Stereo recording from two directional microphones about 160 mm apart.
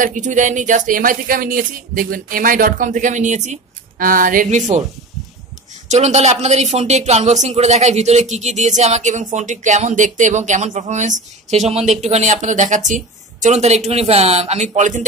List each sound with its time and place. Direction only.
0.0 s speech: 50° right (ahead or behind)
4.0 s speech: 60° right (ahead or behind)
5.9 s speech: 45° right (ahead or behind)